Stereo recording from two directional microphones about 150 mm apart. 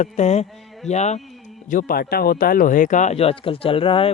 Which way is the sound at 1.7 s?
65° left (ahead or behind).